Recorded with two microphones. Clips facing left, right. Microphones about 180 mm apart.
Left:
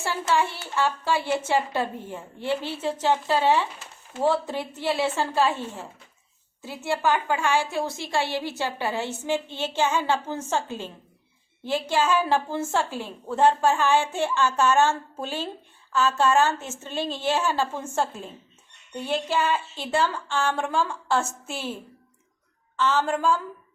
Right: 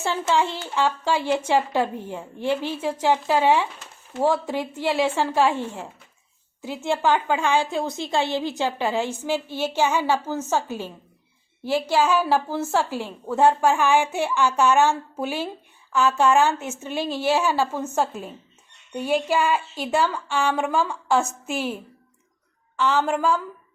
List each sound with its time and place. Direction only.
0.0 s a woman's voice: 20° right (ahead or behind)
18.9 s speech: 10° right (ahead or behind)
22.8 s speech: 10° right (ahead or behind)